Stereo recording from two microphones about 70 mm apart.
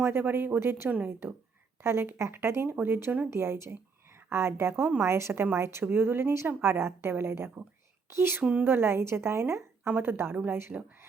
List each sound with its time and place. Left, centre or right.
0.0 s a woman's voice: right
0.9 s a woman's voice: centre
1.8 s a woman's voice: right